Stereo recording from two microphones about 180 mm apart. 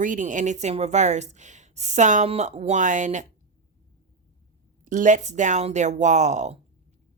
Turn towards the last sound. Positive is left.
turn(degrees=-40)  # may be behind; listen again after turning